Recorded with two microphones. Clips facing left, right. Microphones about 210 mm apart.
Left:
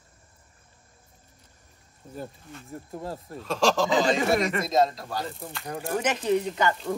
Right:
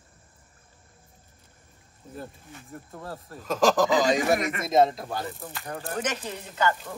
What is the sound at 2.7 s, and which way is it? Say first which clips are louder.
Speech: left 4 dB; 25° left (ahead or behind).